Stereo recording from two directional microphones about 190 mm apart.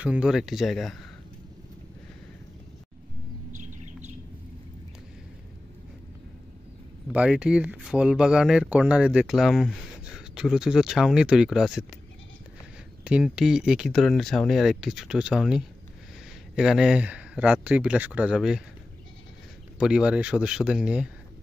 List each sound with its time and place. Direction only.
0.0 s speech: 5° right (ahead or behind)
3.5 s bird: 40° right (ahead or behind)
7.1 s speech: 5° right (ahead or behind)
13.0 s speech: 5° right (ahead or behind)
19.8 s speech: 5° right (ahead or behind)